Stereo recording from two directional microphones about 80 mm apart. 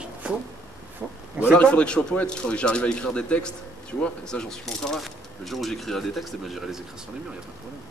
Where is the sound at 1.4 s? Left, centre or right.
Centre.